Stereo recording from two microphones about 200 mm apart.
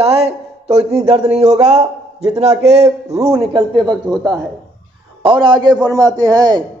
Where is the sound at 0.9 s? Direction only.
30° right (ahead or behind).